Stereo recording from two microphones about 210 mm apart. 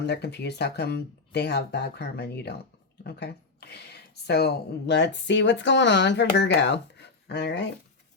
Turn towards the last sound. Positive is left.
turn(degrees=55)  # may be behind; listen again after turning